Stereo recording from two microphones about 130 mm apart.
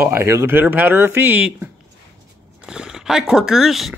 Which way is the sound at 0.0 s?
20° right (ahead or behind).